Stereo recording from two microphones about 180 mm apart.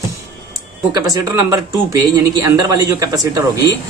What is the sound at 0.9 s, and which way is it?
A man's voice, 20° right (ahead or behind).